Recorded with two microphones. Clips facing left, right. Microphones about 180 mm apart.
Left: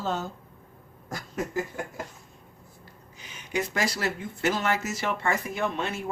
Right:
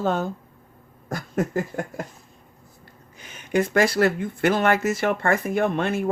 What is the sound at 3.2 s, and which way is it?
Speech, 50° right (ahead or behind).